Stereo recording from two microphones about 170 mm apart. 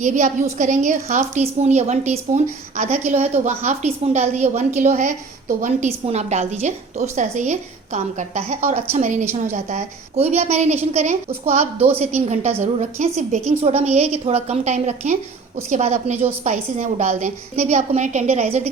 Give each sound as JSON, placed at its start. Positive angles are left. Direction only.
{"t": 0.0, "sound": "a woman's voice", "side_deg": -45}